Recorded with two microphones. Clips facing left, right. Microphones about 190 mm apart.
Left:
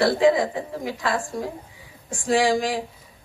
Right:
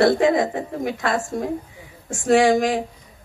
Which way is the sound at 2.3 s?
20° right (ahead or behind).